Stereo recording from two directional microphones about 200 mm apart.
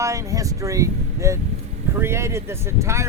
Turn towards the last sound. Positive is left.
turn(degrees=-15)  # may be behind; listen again after turning